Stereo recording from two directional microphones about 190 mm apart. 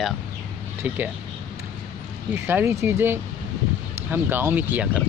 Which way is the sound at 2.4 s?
10° right (ahead or behind).